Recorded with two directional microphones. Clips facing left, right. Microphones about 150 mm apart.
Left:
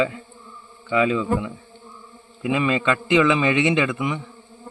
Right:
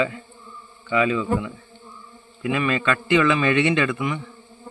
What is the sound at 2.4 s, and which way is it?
A man's voice, 15° left (ahead or behind).